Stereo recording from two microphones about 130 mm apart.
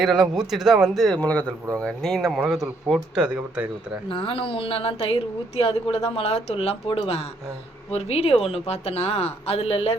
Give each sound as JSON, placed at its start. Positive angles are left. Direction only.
{"t": 0.0, "sound": "speech", "side_deg": -5}
{"t": 4.1, "sound": "speech", "side_deg": 45}